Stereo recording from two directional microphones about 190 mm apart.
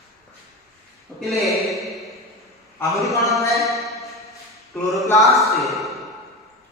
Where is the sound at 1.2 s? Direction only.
Centre (ahead or behind).